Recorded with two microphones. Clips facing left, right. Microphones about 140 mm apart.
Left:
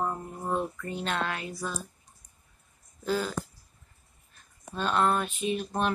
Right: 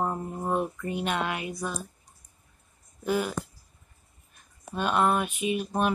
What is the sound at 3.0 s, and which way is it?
Speech, 15° right (ahead or behind).